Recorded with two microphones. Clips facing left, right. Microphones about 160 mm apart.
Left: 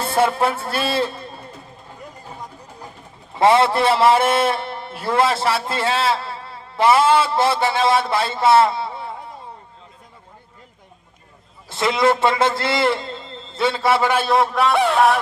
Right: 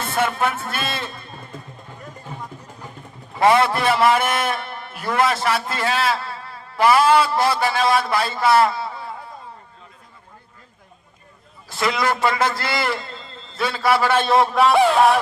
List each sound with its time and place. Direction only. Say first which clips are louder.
0.0 s speech: left 3 dB; 30° left (ahead or behind)
3.3 s a man's voice: left 1 dB; 25° left (ahead or behind)
11.7 s a man's voice: left 4 dB; 25° left (ahead or behind)
14.3 s a sound: right 1 dB; centre (ahead or behind)